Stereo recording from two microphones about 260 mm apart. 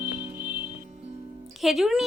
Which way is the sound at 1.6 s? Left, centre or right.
Centre.